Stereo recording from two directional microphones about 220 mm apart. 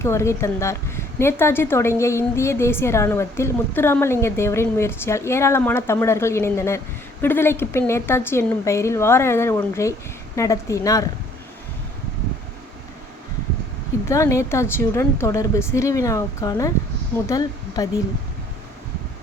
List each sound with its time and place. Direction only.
0.0 s a woman's voice: 10° left (ahead or behind)
14.1 s a woman's voice: 15° left (ahead or behind)